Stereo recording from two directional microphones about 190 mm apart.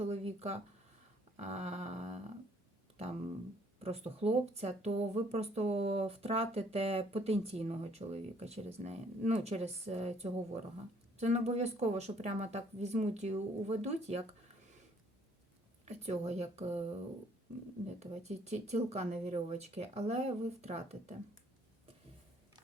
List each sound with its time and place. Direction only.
0.0 s a sound: 35° right (ahead or behind)
1.4 s speech: 35° right (ahead or behind)
3.8 s speech: 35° right (ahead or behind)
15.9 s speech: 35° right (ahead or behind)
18.0 s speech: 35° right (ahead or behind)